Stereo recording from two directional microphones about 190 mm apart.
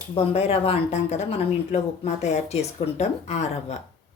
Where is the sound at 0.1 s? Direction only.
30° left (ahead or behind).